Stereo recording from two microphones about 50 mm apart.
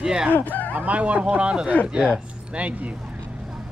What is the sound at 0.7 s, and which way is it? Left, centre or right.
Speech, right.